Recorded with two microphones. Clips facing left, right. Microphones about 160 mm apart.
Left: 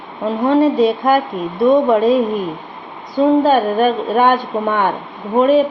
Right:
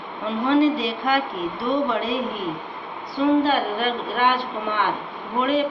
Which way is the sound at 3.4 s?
45° left (ahead or behind).